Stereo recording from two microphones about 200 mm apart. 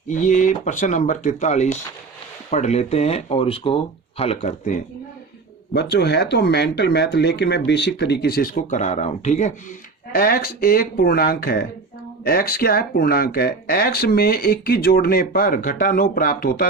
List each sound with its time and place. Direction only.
0.1 s speech: 40° left (ahead or behind)
5.7 s speech: 55° left (ahead or behind); by 9.5 s 35° left (ahead or behind)
10.1 s speech: 45° left (ahead or behind)